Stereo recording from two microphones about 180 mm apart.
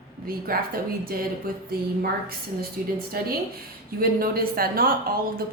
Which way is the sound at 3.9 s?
55° right (ahead or behind).